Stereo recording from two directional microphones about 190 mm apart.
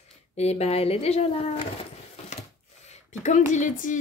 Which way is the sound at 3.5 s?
40° left (ahead or behind).